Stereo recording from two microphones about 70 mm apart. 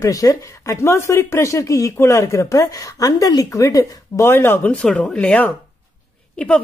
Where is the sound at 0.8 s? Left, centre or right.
Left.